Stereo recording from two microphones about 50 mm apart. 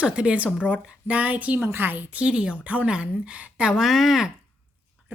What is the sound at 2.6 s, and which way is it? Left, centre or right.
Speech, right.